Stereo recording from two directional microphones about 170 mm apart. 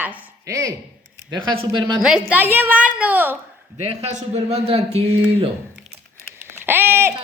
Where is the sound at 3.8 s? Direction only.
40° right (ahead or behind).